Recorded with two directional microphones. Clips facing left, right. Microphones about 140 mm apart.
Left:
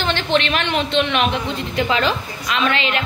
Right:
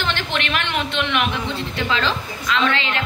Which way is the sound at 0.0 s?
25° left (ahead or behind).